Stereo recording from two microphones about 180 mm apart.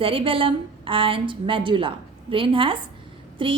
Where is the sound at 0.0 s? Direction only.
30° right (ahead or behind).